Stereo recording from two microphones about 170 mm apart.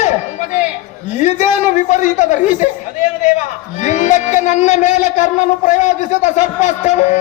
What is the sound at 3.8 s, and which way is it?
A man's voice, 45° left (ahead or behind).